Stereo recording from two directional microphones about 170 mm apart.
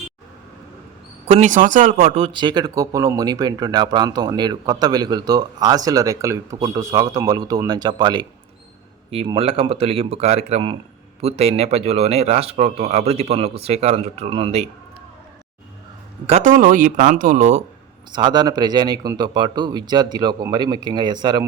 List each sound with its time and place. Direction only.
1.3 s speech: 45° right (ahead or behind)
16.2 s a man's voice: 45° right (ahead or behind)
18.1 s speech: 25° right (ahead or behind)